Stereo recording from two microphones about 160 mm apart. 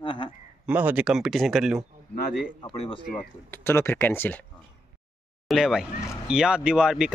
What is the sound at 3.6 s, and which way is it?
Speech, 15° left (ahead or behind).